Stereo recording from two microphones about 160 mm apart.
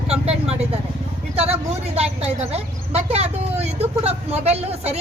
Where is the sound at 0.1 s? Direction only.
40° right (ahead or behind).